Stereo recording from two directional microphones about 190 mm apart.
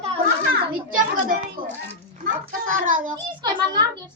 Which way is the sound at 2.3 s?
45° right (ahead or behind).